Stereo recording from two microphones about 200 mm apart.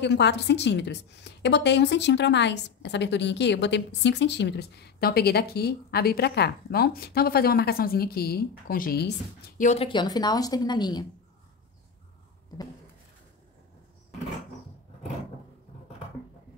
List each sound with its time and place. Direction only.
0.0 s a woman's voice: 60° left (ahead or behind)
9.6 s a woman's voice: 30° left (ahead or behind)